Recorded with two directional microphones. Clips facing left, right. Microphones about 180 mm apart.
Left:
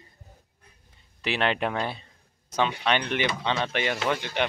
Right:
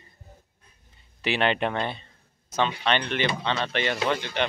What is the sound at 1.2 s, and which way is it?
Speech, centre (ahead or behind).